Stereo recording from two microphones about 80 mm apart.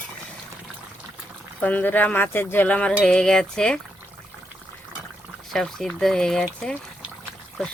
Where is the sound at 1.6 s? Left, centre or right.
Left.